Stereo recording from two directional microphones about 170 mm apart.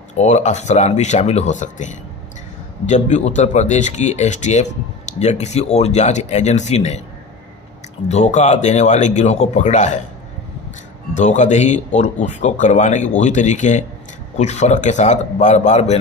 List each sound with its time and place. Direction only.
0.1 s a man's voice: 45° left (ahead or behind)
8.1 s a man's voice: 40° left (ahead or behind)
11.1 s a man's voice: 45° left (ahead or behind)